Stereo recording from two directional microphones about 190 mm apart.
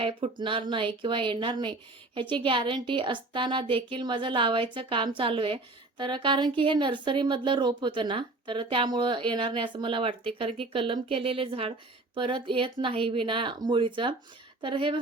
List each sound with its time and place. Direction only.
0.0 s a woman's voice: 30° right (ahead or behind)